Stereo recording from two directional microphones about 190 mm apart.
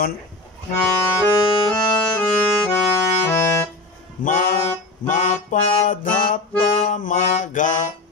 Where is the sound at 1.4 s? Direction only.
30° left (ahead or behind).